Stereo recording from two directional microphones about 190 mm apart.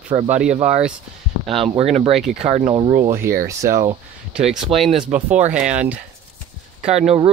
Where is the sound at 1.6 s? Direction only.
30° right (ahead or behind).